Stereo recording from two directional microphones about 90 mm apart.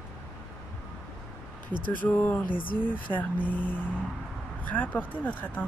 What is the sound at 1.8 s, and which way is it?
Speech, 20° left (ahead or behind).